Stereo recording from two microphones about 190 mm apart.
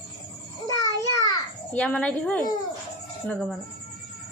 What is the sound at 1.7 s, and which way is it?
A woman's voice, 5° left (ahead or behind).